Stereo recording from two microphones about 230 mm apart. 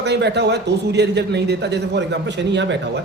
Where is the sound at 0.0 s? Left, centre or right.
Right.